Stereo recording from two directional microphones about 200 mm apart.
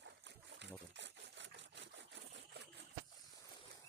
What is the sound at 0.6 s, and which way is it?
Trickle, 60° right (ahead or behind).